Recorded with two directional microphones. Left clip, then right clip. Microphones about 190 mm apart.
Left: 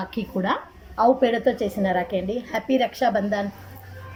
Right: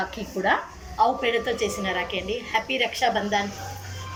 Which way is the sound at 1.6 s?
55° left (ahead or behind).